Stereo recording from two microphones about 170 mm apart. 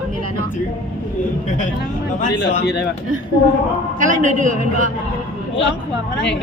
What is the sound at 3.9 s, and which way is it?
Speech, 45° right (ahead or behind).